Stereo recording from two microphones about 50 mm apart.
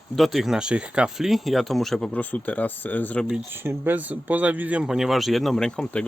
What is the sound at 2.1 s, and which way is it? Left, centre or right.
Speech, left.